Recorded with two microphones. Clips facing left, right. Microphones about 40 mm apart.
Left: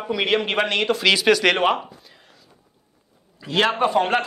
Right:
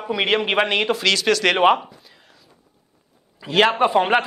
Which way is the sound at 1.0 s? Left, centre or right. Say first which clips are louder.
Left 2 dB; centre.